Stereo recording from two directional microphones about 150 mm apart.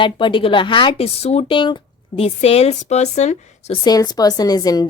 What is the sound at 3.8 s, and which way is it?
A woman's voice, 25° left (ahead or behind).